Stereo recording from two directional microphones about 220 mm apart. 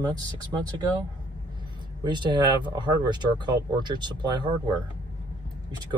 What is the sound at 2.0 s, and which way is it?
Speech, 20° right (ahead or behind).